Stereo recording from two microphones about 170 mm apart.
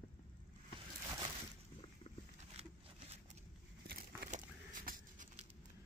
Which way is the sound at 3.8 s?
65° right (ahead or behind).